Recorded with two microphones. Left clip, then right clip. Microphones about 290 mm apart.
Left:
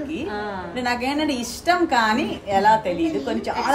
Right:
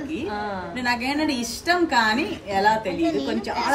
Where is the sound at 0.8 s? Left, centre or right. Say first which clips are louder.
Left 1 dB; centre.